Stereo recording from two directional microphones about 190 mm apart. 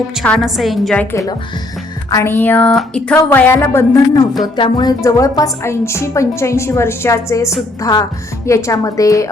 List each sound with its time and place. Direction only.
0.2 s a woman's voice: centre (ahead or behind)
1.1 s a woman's voice: 15° left (ahead or behind)